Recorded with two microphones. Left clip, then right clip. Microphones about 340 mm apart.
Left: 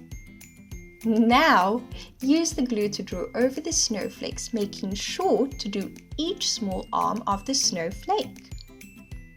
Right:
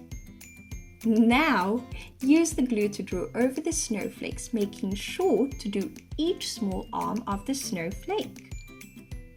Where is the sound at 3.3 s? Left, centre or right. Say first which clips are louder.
Left 4 dB; centre.